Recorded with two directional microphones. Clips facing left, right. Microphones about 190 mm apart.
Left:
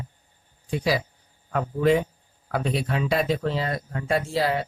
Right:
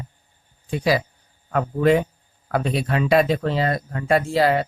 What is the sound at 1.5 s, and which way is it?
Speech, 65° right (ahead or behind).